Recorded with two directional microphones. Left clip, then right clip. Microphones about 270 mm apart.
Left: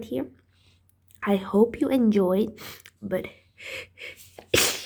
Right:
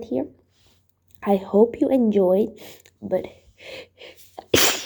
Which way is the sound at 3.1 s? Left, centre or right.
Centre.